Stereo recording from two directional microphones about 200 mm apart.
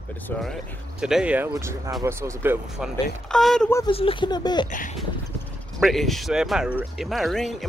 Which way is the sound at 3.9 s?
30° left (ahead or behind).